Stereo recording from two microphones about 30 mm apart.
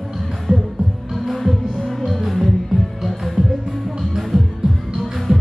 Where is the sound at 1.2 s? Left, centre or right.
Centre.